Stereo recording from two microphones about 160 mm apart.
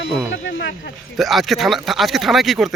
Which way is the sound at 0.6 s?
90° left.